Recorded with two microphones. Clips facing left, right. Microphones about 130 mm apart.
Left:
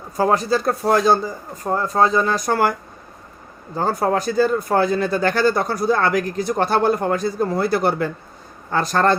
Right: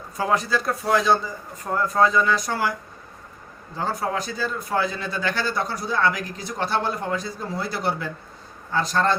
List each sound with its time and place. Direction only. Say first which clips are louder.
0.2 s speech: left 5 dB; 40° left (ahead or behind); by 2.7 s 55° left (ahead or behind)
3.8 s speech: left 6 dB; 45° left (ahead or behind)